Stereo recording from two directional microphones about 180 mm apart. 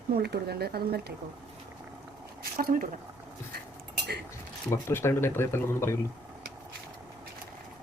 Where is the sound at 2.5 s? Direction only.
50° right (ahead or behind).